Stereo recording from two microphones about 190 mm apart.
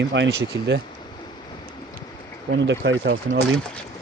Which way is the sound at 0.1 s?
70° right (ahead or behind).